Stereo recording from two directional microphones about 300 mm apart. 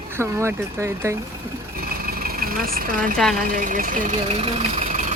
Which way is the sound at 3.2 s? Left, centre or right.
Centre.